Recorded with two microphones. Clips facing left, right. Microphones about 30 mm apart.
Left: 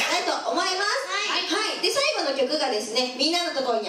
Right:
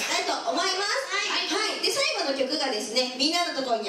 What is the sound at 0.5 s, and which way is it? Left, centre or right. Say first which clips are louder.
Speech: left 1 dB; centre.